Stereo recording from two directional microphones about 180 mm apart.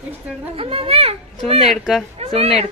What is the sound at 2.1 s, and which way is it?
Speech, 35° right (ahead or behind).